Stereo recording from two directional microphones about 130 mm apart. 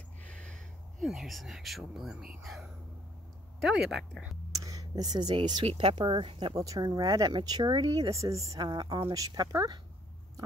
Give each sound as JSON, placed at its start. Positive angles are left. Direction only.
{"t": 0.2, "sound": "a sound", "side_deg": 10}
{"t": 1.0, "sound": "speech", "side_deg": 0}
{"t": 4.6, "sound": "speech", "side_deg": -25}
{"t": 5.7, "sound": "speech", "side_deg": -45}
{"t": 6.5, "sound": "speech", "side_deg": -25}